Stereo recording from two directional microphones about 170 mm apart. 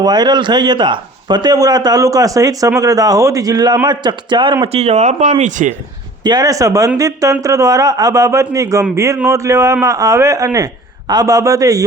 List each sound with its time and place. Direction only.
0.0 s a man's voice: 25° right (ahead or behind); by 5.7 s 45° right (ahead or behind)
6.2 s a man's voice: 20° right (ahead or behind)